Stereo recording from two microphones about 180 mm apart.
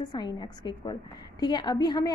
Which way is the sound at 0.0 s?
25° left (ahead or behind).